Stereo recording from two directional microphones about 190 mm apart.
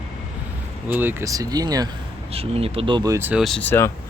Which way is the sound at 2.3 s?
30° right (ahead or behind).